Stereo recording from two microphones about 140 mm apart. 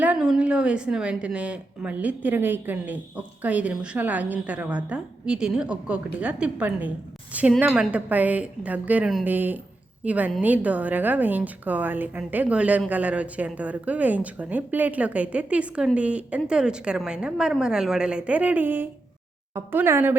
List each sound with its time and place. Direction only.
0.0 s a woman's voice: 5° right (ahead or behind)